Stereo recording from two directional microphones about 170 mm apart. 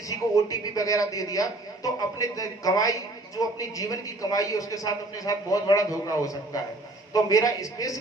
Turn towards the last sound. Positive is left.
turn(degrees=20)  # may be behind; listen again after turning